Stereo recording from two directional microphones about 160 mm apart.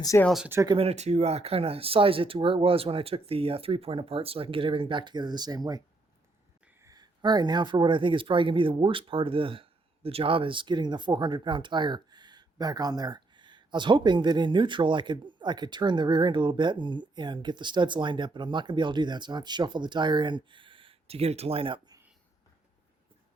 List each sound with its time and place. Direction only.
0.0 s speech: 20° left (ahead or behind)
0.4 s speech: 15° right (ahead or behind)
0.7 s speech: 40° right (ahead or behind)
6.8 s speech: 25° right (ahead or behind)